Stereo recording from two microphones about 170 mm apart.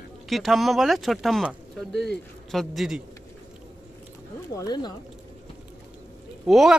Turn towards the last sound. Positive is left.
turn(degrees=0)  # may be behind; listen again after turning